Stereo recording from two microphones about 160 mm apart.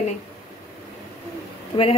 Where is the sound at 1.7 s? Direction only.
30° left (ahead or behind).